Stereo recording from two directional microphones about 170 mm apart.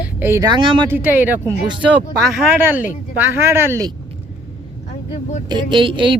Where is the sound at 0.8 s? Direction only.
10° right (ahead or behind).